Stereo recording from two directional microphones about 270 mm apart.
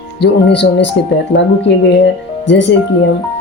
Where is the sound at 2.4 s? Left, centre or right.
Left.